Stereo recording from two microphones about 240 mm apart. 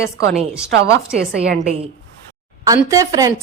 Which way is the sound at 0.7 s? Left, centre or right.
Right.